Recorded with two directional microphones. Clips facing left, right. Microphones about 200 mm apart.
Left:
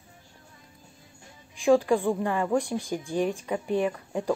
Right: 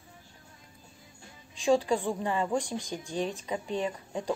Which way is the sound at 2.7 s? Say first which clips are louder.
Left 5 dB; 10° left (ahead or behind).